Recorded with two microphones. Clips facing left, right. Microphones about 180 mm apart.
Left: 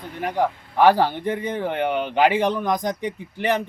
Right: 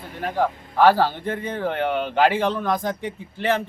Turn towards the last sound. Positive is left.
turn(degrees=15)  # may be behind; listen again after turning